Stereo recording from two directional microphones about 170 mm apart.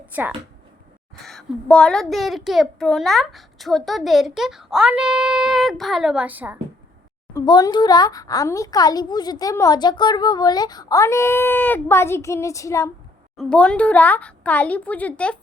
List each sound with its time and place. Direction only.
0.0 s speech: 10° right (ahead or behind)
1.2 s a child's voice: centre (ahead or behind)
7.3 s speech: 20° left (ahead or behind)
13.3 s speech: 5° left (ahead or behind)